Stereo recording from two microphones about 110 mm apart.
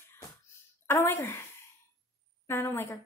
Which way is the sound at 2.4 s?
20° left (ahead or behind).